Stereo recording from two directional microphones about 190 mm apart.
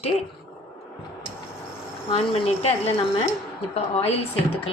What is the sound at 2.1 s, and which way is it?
Speech, 30° left (ahead or behind).